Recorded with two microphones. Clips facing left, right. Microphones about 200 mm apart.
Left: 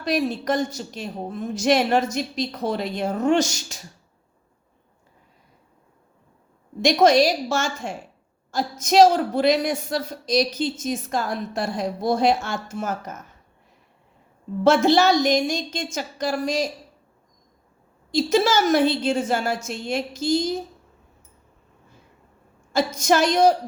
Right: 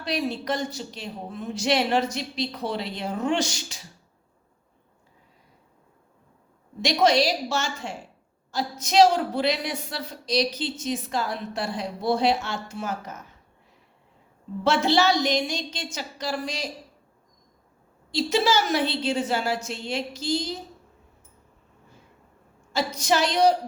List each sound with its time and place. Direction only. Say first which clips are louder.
0.0 s a woman's voice: left 4 dB; 45° left (ahead or behind)
6.8 s a woman's voice: left 5 dB; 45° left (ahead or behind)
14.6 s a woman's voice: left 5 dB; 45° left (ahead or behind)
18.1 s a woman's voice: left 3 dB; 45° left (ahead or behind)
22.7 s a woman's voice: left 4 dB; 45° left (ahead or behind)